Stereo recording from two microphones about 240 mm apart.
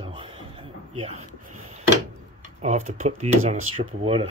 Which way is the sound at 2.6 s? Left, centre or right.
Right.